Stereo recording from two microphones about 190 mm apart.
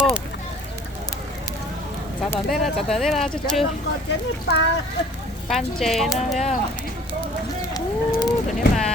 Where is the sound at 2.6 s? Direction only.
Centre (ahead or behind).